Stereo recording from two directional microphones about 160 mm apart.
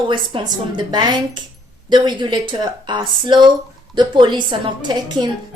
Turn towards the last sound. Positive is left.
turn(degrees=-25)  # may be behind; listen again after turning